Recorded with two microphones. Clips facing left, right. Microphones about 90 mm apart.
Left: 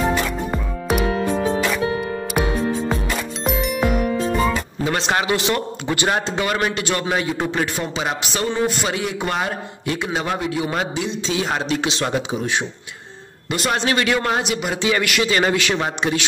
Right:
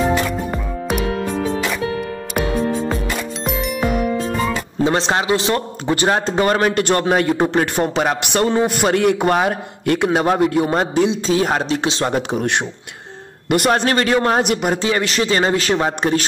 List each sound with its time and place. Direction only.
3.4 s music: centre (ahead or behind)
4.8 s a man's voice: 30° right (ahead or behind); by 7.3 s 50° right (ahead or behind)
7.3 s speech: 35° right (ahead or behind)
7.6 s a man's voice: 55° right (ahead or behind); by 12.2 s 35° right (ahead or behind)
12.2 s a man's voice: 60° right (ahead or behind)
13.7 s speech: 40° right (ahead or behind)
14.4 s speech: 50° right (ahead or behind)